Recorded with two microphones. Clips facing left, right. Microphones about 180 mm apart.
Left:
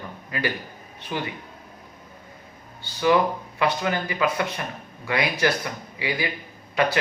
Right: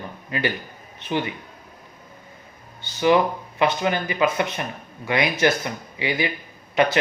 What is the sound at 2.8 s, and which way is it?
Speech, 20° right (ahead or behind).